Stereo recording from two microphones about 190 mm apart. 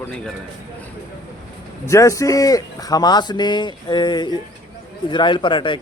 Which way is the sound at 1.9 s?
15° left (ahead or behind).